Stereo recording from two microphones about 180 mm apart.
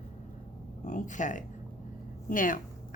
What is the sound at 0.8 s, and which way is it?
A woman's voice, 45° left (ahead or behind).